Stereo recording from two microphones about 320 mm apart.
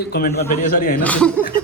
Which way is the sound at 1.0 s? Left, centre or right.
Centre.